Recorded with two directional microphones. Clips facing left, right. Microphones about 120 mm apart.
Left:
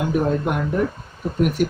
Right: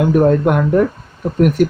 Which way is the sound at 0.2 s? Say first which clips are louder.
Right 9 dB; 85° right.